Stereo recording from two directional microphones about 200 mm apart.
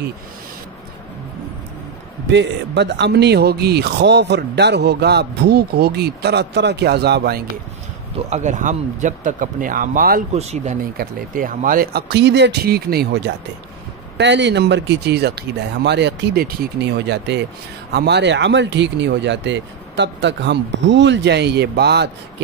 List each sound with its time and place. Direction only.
2.3 s speech: 60° right (ahead or behind)
8.3 s speech: 35° right (ahead or behind)
10.3 s speech: 30° right (ahead or behind); by 13.0 s 50° right (ahead or behind)
14.1 s speech: 60° right (ahead or behind)